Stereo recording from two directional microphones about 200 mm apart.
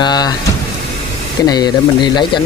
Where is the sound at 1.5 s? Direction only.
20° left (ahead or behind).